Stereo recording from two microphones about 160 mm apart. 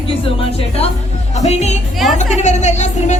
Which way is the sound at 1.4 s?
45° left (ahead or behind).